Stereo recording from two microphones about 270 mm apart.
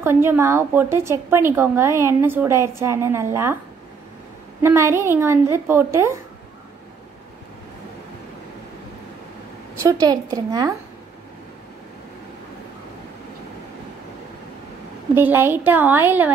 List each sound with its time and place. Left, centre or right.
0.0 s a woman's voice: centre
4.6 s a woman's voice: centre
9.8 s a woman's voice: centre
15.1 s a woman's voice: centre